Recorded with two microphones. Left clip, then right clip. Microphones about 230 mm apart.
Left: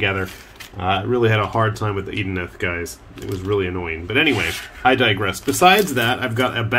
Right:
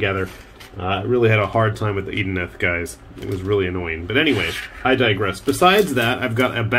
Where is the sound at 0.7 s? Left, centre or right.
Centre.